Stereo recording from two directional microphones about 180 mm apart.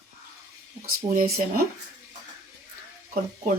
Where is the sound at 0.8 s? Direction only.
55° right (ahead or behind).